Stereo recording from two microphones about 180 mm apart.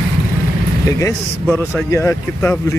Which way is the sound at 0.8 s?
15° left (ahead or behind).